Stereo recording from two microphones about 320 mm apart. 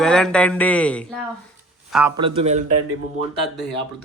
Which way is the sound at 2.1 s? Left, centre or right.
Centre.